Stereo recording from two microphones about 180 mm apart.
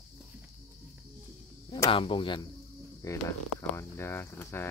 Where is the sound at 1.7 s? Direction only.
25° left (ahead or behind).